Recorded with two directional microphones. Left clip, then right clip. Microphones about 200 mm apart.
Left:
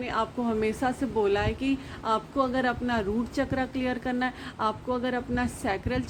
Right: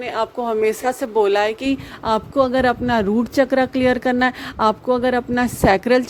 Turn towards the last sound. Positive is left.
turn(degrees=-50)  # may be behind; listen again after turning